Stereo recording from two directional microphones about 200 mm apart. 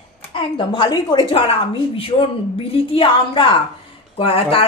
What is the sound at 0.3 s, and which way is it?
A woman's voice, 25° left (ahead or behind).